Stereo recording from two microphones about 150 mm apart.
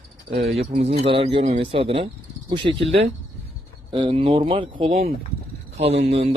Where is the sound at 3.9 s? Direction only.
35° right (ahead or behind).